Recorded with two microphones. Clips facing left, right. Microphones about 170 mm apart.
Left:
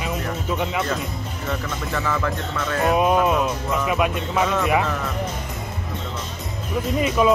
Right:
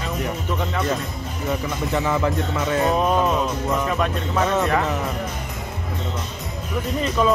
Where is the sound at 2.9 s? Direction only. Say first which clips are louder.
Left 1 dB; 10° left (ahead or behind).